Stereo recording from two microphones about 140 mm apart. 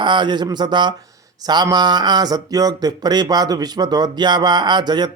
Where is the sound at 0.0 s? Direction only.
35° right (ahead or behind).